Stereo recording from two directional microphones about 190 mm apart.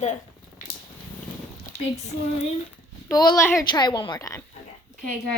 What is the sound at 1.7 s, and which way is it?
Speech, 60° left (ahead or behind).